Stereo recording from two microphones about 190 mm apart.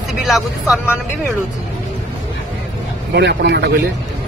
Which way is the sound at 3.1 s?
65° right (ahead or behind).